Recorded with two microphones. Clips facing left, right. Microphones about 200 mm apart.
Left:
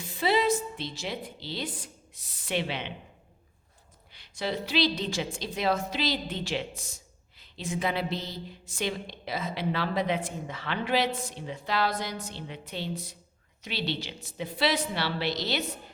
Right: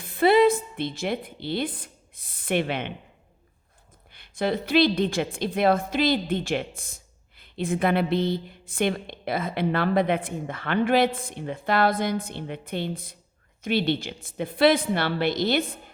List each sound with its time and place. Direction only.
0.0 s a woman's voice: 55° right (ahead or behind)
4.1 s a woman's voice: 55° right (ahead or behind)